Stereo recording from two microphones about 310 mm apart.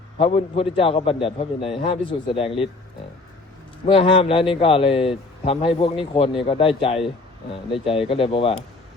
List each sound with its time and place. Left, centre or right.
0.2 s a man's voice: centre
3.8 s a man's voice: centre